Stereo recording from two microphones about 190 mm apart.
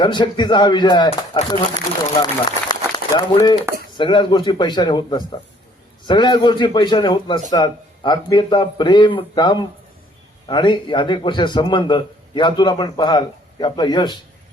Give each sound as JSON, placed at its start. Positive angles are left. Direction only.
{"t": 0.0, "sound": "speech", "side_deg": 25}
{"t": 2.6, "sound": "a sound", "side_deg": 20}
{"t": 3.9, "sound": "speech", "side_deg": 25}